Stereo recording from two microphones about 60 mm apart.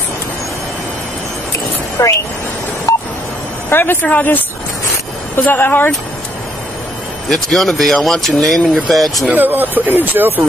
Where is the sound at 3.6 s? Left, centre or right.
Left.